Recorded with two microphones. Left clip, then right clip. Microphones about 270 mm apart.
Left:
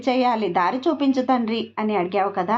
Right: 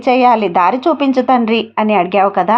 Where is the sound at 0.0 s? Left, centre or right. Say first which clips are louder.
Right 10 dB; right.